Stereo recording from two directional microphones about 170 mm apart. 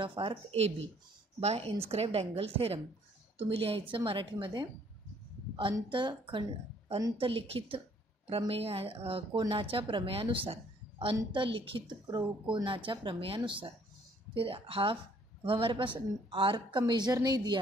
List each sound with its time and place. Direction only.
0.0 s a woman's voice: 30° right (ahead or behind)